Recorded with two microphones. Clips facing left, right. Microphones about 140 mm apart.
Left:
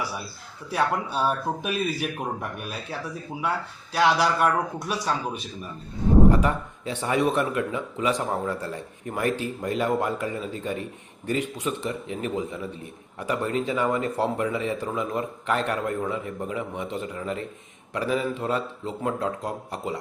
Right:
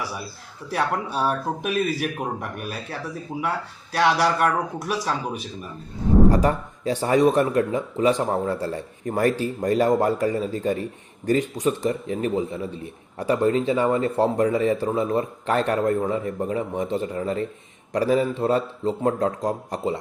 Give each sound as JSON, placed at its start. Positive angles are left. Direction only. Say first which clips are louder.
{"t": 0.7, "sound": "speech", "louder": "right 1 dB", "side_deg": 0}
{"t": 6.3, "sound": "a man's voice", "louder": "right 3 dB", "side_deg": -35}